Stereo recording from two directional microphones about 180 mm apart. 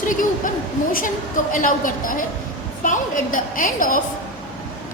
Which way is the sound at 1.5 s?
50° left (ahead or behind).